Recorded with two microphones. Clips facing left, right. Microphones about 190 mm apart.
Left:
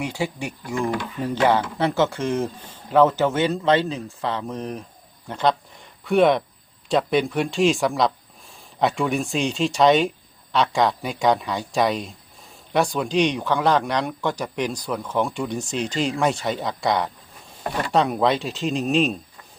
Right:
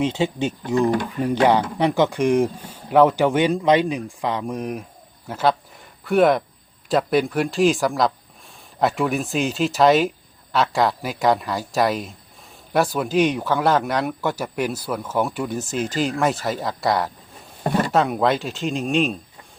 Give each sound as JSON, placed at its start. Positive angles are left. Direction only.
{"t": 0.0, "sound": "speech", "side_deg": -20}
{"t": 0.8, "sound": "speech", "side_deg": -40}
{"t": 1.2, "sound": "speech", "side_deg": -15}